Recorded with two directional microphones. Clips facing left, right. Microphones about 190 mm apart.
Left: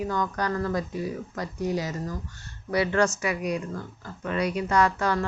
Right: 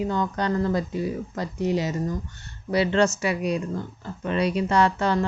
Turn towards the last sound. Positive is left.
turn(degrees=-25)  # may be behind; listen again after turning